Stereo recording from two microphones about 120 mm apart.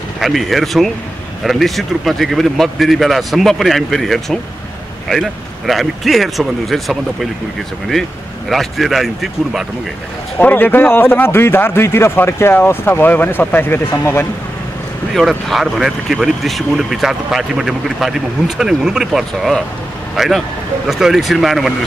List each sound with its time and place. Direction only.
0.2 s speech: centre (ahead or behind)
8.5 s speech: centre (ahead or behind)
10.4 s speech: 15° left (ahead or behind)
15.1 s speech: centre (ahead or behind)